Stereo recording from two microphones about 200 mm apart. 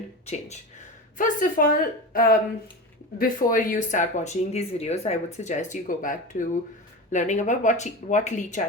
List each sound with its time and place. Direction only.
0.3 s a woman's voice: 35° left (ahead or behind)